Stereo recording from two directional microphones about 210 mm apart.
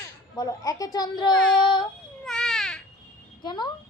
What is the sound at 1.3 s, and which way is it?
Child singing, 5° left (ahead or behind).